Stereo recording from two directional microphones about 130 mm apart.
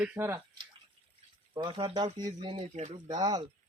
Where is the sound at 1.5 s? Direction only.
40° right (ahead or behind).